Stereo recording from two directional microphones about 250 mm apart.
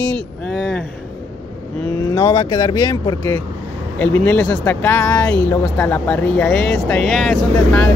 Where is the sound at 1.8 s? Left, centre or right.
Centre.